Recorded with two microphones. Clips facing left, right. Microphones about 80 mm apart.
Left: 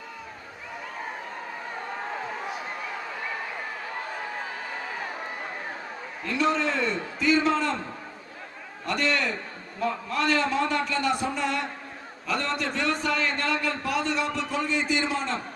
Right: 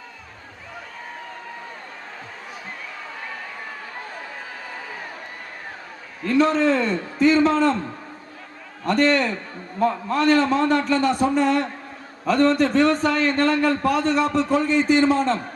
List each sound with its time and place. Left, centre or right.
6.2 s a man's voice: right
8.9 s a man's voice: right